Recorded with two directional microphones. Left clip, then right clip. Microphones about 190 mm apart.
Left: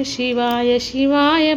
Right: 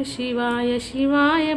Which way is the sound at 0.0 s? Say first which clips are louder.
Left 5 dB; 20° left (ahead or behind).